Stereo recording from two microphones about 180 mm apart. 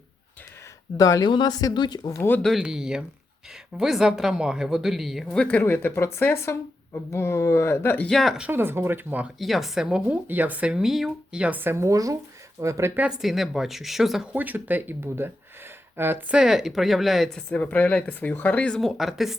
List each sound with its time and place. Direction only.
0.9 s speech: 20° left (ahead or behind); by 19.4 s centre (ahead or behind)